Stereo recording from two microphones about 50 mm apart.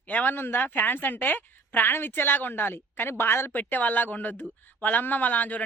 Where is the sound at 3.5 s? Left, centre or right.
Left.